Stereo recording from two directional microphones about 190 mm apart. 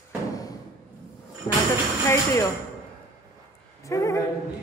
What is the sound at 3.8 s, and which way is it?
Speech, 15° left (ahead or behind).